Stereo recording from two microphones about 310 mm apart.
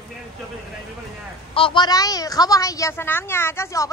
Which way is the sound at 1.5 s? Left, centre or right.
Centre.